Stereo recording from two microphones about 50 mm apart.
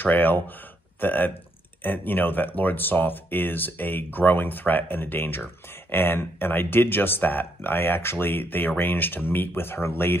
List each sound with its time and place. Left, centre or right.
0.0 s speech: left